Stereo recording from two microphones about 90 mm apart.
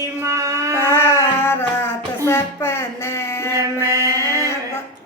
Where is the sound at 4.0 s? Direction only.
40° right (ahead or behind).